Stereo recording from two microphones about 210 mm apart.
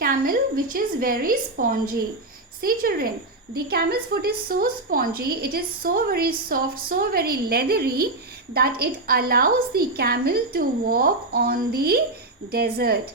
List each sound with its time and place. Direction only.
0.0 s a woman's voice: 45° right (ahead or behind)